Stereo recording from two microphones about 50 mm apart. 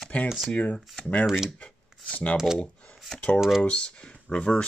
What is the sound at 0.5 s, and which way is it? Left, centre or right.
Speech, left.